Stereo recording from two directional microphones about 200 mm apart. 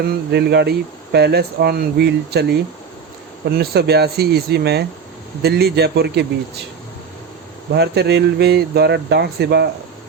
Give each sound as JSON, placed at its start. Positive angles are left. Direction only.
{"t": 0.3, "sound": "speech", "side_deg": -55}
{"t": 7.7, "sound": "speech", "side_deg": -55}